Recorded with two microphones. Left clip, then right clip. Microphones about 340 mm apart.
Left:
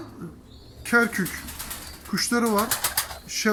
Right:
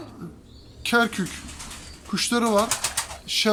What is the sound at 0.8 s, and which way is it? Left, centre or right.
Speech, centre.